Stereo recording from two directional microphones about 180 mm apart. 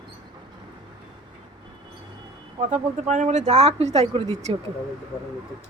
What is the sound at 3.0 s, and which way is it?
Speech, 40° right (ahead or behind).